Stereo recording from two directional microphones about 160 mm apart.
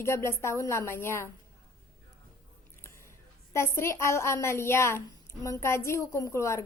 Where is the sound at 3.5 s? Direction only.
15° left (ahead or behind).